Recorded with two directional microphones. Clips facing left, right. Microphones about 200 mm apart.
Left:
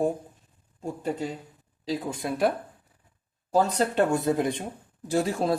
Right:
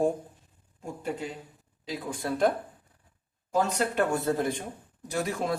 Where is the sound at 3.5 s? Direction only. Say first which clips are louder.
Left 3 dB; 35° left (ahead or behind).